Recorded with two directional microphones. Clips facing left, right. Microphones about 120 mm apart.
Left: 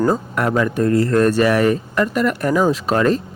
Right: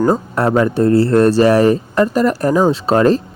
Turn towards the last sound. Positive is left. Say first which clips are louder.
# right 4 dB
turn(degrees=-35)  # may be behind; listen again after turning